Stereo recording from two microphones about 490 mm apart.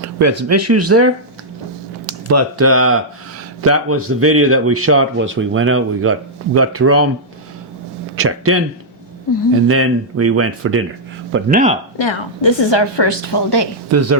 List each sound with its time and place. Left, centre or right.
0.2 s speech: right
8.1 s speech: right
9.6 s speech: right
11.9 s a woman's voice: left
13.9 s speech: right